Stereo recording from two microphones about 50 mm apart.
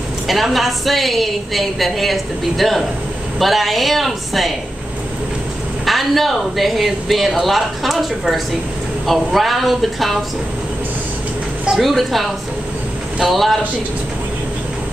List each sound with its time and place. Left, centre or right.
0.3 s speech: centre
5.9 s speech: centre
11.8 s speech: centre